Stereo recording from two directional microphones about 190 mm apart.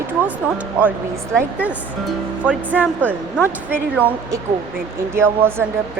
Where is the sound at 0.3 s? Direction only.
10° right (ahead or behind).